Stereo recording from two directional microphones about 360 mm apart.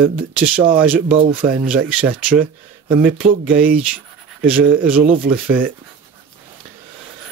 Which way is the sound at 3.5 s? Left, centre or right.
Right.